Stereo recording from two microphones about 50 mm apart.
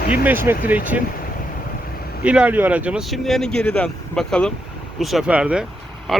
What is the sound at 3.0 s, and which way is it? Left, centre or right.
Speech, centre.